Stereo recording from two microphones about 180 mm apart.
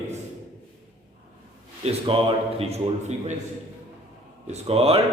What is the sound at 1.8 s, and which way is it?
A man's voice, 30° right (ahead or behind).